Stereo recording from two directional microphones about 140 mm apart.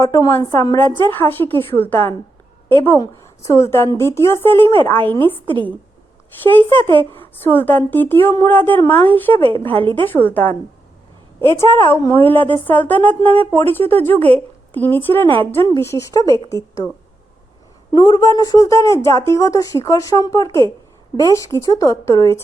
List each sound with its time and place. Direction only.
0.0 s a woman's voice: 25° left (ahead or behind)
11.5 s a woman's voice: 15° left (ahead or behind)
17.9 s speech: 30° left (ahead or behind)